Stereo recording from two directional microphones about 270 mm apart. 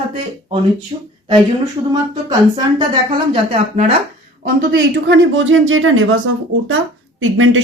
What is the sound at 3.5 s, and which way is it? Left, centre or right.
Speech, right.